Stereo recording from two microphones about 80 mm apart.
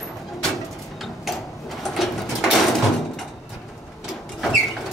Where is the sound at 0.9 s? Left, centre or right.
Centre.